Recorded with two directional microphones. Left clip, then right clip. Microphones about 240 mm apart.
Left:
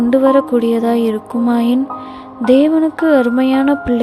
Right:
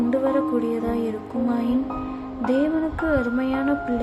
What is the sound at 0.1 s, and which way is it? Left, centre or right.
Music, left.